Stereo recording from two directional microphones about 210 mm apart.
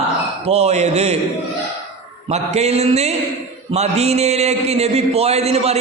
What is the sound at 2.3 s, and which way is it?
A man's voice, 30° right (ahead or behind).